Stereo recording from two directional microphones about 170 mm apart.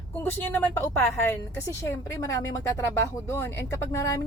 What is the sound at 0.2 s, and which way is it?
A woman's voice, 10° left (ahead or behind).